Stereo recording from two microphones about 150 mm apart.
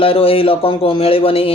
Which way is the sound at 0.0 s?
40° left (ahead or behind).